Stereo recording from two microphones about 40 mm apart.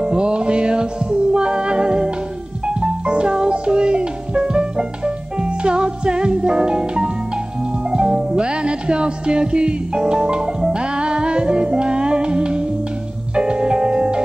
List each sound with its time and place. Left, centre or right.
0.0 s music: right